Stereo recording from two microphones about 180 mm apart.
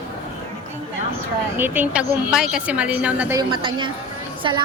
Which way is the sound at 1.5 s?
10° right (ahead or behind).